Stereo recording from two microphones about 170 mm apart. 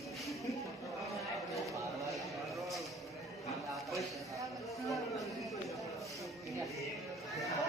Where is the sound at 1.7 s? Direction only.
20° right (ahead or behind).